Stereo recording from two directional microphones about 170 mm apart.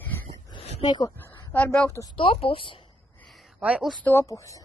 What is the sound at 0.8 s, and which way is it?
Speech, 25° left (ahead or behind).